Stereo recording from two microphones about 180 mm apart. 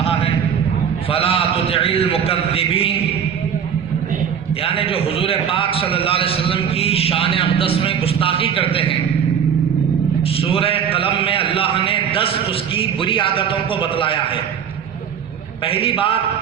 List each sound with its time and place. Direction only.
0.0 s a sound: 35° left (ahead or behind)
1.1 s a man's voice: 30° left (ahead or behind)
4.6 s a man's voice: 30° left (ahead or behind)
10.4 s a man's voice: 30° left (ahead or behind)
15.6 s a man's voice: 30° left (ahead or behind)